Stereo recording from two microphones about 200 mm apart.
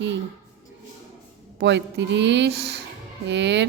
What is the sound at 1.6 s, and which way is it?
A woman's voice, 60° right (ahead or behind).